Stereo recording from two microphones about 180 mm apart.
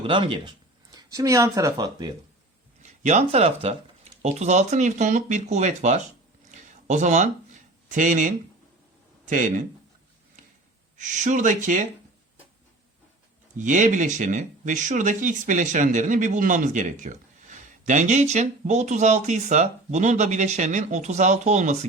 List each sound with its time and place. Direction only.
0.0 s speech: 30° right (ahead or behind)
2.8 s speech: 40° right (ahead or behind)
6.5 s a sound: 40° right (ahead or behind)
7.9 s speech: 45° right (ahead or behind)
10.9 s speech: 45° right (ahead or behind)
13.6 s speech: 45° right (ahead or behind)